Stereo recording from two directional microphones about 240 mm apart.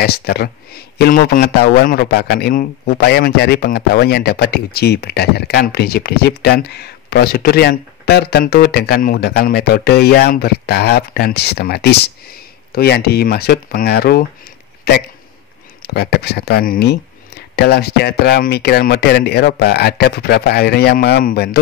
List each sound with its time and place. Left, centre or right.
0.0 s a man's voice: left
15.8 s a man's voice: left